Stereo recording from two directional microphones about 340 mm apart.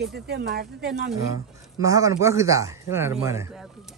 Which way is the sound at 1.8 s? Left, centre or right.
Centre.